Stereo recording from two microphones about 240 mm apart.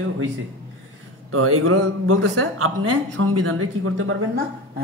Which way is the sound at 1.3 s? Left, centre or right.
Right.